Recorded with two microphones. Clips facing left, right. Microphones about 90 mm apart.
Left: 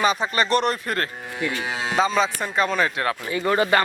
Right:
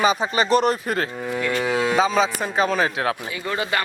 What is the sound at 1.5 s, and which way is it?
Speech, 50° right (ahead or behind).